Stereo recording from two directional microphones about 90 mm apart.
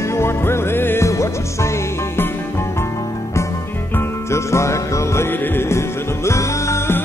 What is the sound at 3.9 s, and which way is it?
Music, 30° left (ahead or behind).